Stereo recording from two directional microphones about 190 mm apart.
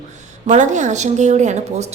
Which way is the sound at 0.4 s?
40° right (ahead or behind).